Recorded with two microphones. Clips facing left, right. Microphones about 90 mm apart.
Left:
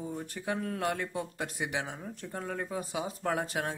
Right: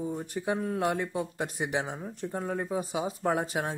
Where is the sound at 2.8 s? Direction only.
30° right (ahead or behind).